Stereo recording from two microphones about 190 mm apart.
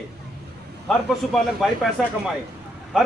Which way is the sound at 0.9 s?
Centre (ahead or behind).